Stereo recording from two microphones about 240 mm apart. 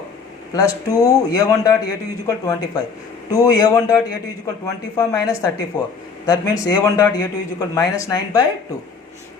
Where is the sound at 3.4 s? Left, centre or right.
Centre.